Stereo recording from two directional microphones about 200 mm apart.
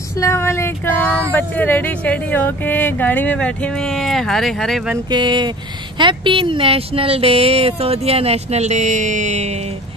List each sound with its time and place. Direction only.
0.2 s a sound: 15° left (ahead or behind)
1.3 s speech: 10° left (ahead or behind)
5.1 s speech: 25° right (ahead or behind)